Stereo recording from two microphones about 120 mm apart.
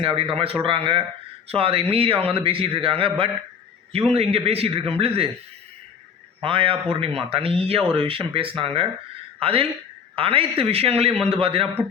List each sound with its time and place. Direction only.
0.0 s a man's voice: 50° right (ahead or behind)
6.4 s a man's voice: 50° right (ahead or behind)